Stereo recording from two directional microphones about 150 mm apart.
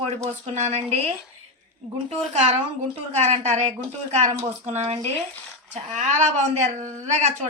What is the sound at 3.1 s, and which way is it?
A woman's voice, 45° right (ahead or behind).